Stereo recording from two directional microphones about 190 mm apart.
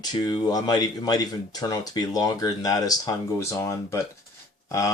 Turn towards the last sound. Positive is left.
turn(degrees=15)  # may be behind; listen again after turning